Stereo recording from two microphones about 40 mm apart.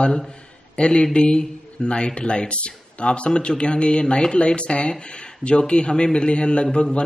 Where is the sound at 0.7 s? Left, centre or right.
Left.